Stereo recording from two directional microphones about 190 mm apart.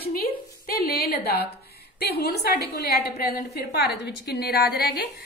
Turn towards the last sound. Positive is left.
turn(degrees=55)  # may be behind; listen again after turning